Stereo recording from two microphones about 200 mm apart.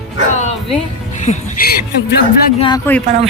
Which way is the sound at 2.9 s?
10° left (ahead or behind).